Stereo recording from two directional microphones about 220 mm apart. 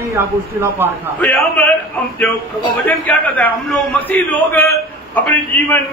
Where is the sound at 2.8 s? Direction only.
5° left (ahead or behind).